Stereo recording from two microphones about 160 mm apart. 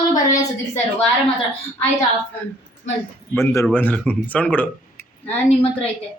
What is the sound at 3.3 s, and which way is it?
Speech, 20° left (ahead or behind).